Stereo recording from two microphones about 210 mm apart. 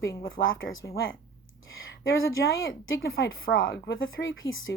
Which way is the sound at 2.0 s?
65° left (ahead or behind).